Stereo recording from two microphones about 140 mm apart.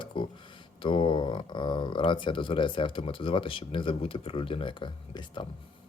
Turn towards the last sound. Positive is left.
turn(degrees=35)  # may be behind; listen again after turning